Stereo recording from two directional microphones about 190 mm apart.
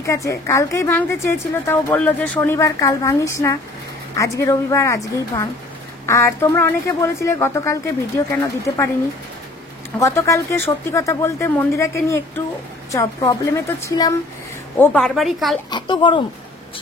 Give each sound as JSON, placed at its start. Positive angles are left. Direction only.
{"t": 0.0, "sound": "a woman's voice", "side_deg": 15}
{"t": 9.9, "sound": "a woman's voice", "side_deg": 15}
{"t": 14.8, "sound": "speech", "side_deg": 5}
{"t": 15.7, "sound": "speech", "side_deg": 25}